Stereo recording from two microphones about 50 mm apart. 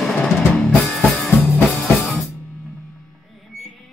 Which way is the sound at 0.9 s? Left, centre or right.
Centre.